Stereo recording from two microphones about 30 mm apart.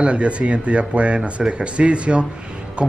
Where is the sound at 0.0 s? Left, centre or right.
Right.